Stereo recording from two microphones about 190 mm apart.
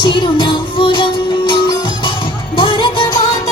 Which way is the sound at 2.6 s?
25° left (ahead or behind).